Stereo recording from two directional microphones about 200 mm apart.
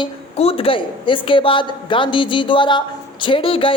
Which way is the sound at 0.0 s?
30° left (ahead or behind).